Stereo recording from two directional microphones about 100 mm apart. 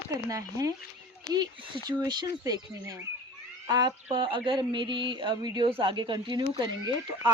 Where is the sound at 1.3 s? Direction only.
50° right (ahead or behind).